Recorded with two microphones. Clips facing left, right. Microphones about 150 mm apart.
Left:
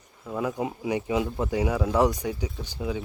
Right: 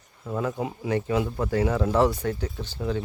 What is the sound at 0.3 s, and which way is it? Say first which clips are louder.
Speech: even; 15° left (ahead or behind).